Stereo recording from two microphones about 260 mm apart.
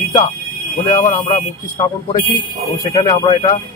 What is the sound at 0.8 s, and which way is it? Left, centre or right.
Speech, left.